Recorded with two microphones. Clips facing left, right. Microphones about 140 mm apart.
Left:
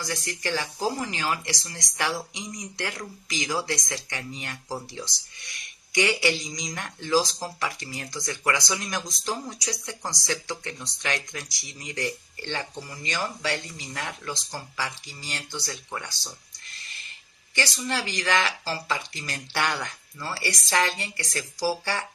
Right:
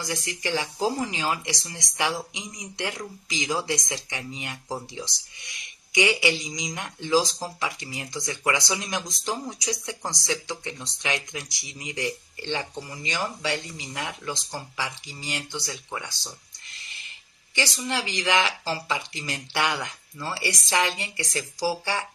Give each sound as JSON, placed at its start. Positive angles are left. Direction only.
{"t": 0.0, "sound": "speech", "side_deg": -20}
{"t": 17.5, "sound": "speech", "side_deg": -15}